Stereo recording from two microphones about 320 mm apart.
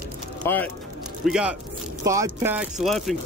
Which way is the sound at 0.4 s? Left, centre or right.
Centre.